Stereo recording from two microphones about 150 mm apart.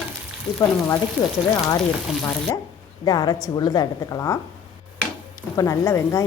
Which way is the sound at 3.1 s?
25° left (ahead or behind).